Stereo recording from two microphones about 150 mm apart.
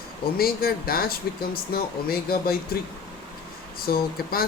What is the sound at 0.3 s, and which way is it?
Speech, 90° left.